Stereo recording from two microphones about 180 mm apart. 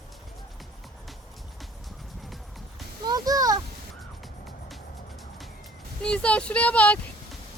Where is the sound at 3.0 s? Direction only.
20° right (ahead or behind).